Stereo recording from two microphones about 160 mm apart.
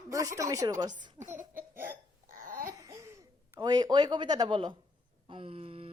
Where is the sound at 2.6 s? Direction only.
20° right (ahead or behind).